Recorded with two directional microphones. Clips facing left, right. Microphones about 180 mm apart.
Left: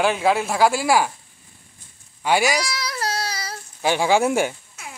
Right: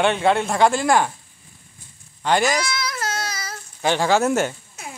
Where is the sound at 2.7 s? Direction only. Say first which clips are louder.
Even; 35° left (ahead or behind).